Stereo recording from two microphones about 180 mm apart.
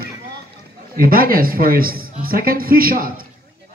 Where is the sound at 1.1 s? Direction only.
55° right (ahead or behind).